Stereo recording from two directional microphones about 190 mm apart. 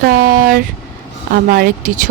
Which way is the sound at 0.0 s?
50° right (ahead or behind).